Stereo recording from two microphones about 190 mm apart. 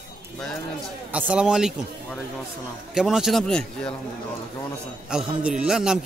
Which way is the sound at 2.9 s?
5° right (ahead or behind).